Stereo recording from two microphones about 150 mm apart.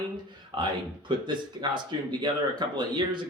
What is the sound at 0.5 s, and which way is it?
Speech, 30° right (ahead or behind).